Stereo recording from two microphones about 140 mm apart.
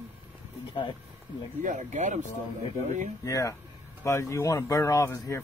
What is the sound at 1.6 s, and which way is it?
Speech, 60° right (ahead or behind).